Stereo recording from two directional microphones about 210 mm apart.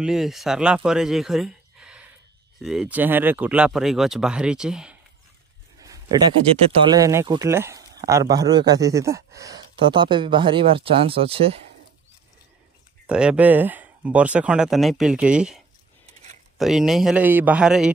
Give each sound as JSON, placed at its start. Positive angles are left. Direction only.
{"t": 0.0, "sound": "speech", "side_deg": 0}
{"t": 5.8, "sound": "a sound", "side_deg": -15}
{"t": 6.9, "sound": "speech", "side_deg": -15}
{"t": 13.0, "sound": "speech", "side_deg": -5}
{"t": 16.1, "sound": "a sound", "side_deg": -30}
{"t": 16.5, "sound": "speech", "side_deg": 0}